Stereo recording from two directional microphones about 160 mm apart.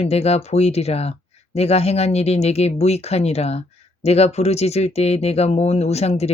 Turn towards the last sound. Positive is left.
turn(degrees=40)  # may be behind; listen again after turning